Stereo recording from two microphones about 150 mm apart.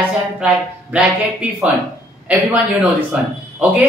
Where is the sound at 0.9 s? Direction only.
10° right (ahead or behind).